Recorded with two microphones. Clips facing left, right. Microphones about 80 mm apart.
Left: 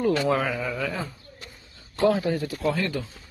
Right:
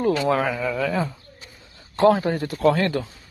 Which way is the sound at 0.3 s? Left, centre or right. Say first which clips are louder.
Right 3 dB; right.